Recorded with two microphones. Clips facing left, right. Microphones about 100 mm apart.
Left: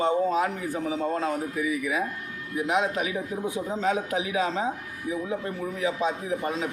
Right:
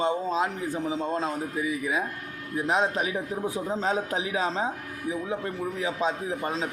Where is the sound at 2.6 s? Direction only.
35° right (ahead or behind).